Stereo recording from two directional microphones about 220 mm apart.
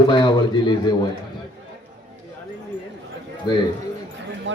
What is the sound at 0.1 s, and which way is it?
Speech, 20° left (ahead or behind).